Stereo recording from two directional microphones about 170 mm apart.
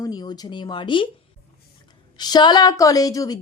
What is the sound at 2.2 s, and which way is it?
A woman's voice, 25° left (ahead or behind).